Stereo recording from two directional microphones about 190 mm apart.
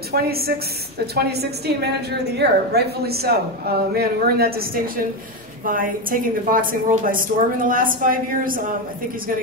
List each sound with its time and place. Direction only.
0.1 s a woman's voice: 55° right (ahead or behind)